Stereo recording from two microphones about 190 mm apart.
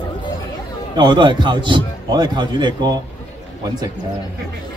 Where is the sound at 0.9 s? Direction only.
25° right (ahead or behind).